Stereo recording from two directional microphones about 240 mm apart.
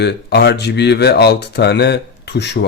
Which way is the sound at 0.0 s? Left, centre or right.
Left.